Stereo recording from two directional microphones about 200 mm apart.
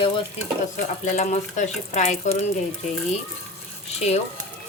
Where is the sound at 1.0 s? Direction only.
35° left (ahead or behind).